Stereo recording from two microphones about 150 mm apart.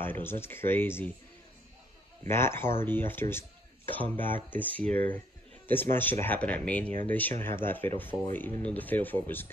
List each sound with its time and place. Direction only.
0.0 s speech: 15° left (ahead or behind)
2.2 s speech: 15° left (ahead or behind)